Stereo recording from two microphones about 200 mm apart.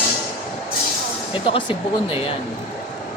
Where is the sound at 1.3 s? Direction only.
25° left (ahead or behind).